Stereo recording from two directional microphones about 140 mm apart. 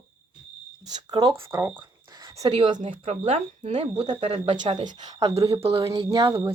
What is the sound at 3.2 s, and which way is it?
Speech, 45° right (ahead or behind).